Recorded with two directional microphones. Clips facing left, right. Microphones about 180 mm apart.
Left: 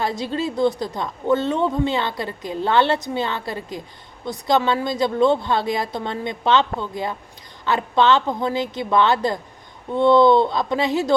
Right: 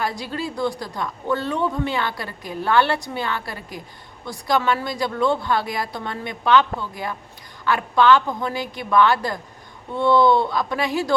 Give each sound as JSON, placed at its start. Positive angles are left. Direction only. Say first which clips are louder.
{"t": 0.0, "sound": "a woman's voice", "louder": "left 3 dB", "side_deg": 25}